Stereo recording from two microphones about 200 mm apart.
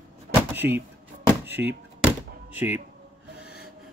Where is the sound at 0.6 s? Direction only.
65° right (ahead or behind).